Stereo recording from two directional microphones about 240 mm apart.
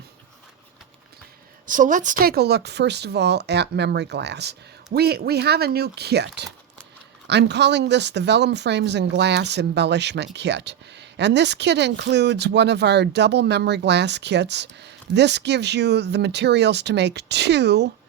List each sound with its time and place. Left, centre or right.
1.6 s speech: right